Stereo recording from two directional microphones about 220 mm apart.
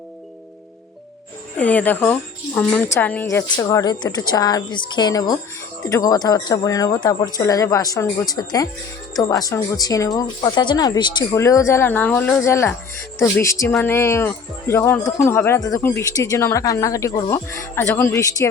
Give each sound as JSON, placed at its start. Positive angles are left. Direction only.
{"t": 1.5, "sound": "a woman's voice", "side_deg": 5}